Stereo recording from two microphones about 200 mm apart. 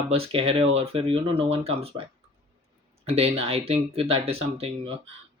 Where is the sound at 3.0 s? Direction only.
30° right (ahead or behind).